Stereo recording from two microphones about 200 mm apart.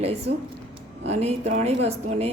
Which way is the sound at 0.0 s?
30° right (ahead or behind).